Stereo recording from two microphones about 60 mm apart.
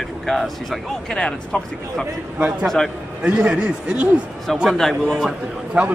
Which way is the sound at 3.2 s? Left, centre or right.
Centre.